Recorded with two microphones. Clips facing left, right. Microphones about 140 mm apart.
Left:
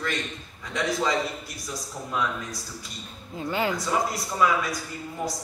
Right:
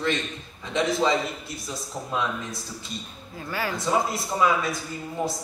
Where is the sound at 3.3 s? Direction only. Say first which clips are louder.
Left 4 dB; 20° left (ahead or behind).